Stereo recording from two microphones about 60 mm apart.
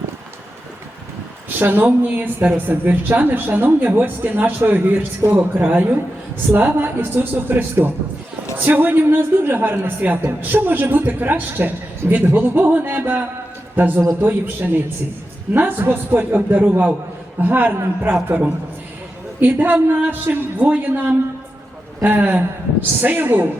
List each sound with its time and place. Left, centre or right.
1.5 s a woman's voice: right